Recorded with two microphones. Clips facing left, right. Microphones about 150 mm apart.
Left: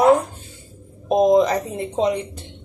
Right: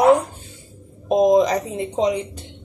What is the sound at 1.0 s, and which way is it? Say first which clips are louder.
Speech: even; 15° right (ahead or behind).